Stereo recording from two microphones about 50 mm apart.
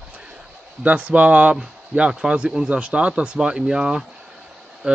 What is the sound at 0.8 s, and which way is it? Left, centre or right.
Speech, right.